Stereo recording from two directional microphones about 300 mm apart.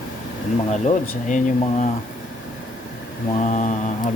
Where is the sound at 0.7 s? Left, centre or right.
Left.